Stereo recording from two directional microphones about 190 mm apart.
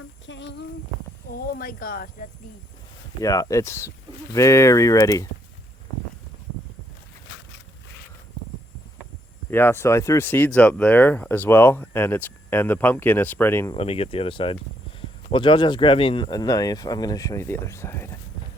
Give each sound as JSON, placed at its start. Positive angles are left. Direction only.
{"t": 0.3, "sound": "child singing", "side_deg": 70}
{"t": 1.3, "sound": "a sound", "side_deg": 50}
{"t": 3.2, "sound": "speech", "side_deg": 20}
{"t": 9.5, "sound": "speech", "side_deg": 10}
{"t": 13.7, "sound": "speech", "side_deg": 30}